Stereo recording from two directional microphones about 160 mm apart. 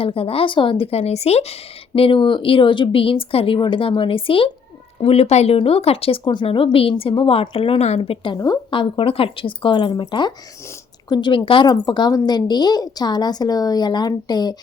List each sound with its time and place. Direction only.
0.0 s a woman's voice: 35° left (ahead or behind)